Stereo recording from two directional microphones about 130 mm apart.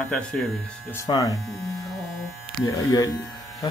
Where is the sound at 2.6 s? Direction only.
25° left (ahead or behind).